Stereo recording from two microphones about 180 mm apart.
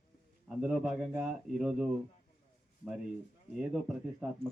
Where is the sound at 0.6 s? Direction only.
5° right (ahead or behind).